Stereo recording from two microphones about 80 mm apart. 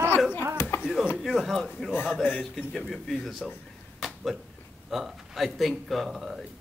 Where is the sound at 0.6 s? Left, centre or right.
Left.